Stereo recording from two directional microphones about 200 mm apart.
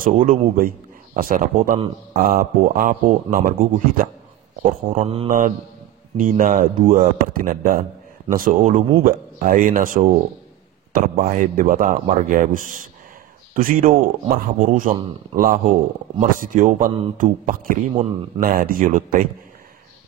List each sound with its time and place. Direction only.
0.0 s speech: 40° right (ahead or behind)
4.6 s speech: 35° right (ahead or behind)
6.1 s speech: 40° right (ahead or behind)